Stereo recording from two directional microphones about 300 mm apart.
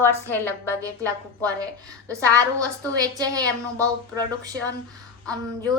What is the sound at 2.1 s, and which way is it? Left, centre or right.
Speech, centre.